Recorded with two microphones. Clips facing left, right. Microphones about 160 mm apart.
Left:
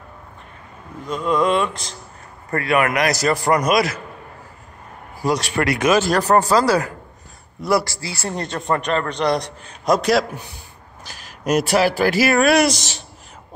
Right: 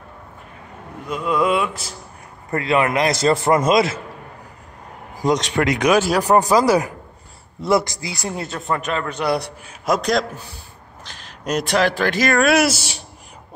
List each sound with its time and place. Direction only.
1.0 s a man's voice: 5° right (ahead or behind)
2.5 s a man's voice: 25° right (ahead or behind)
5.2 s a man's voice: 20° right (ahead or behind)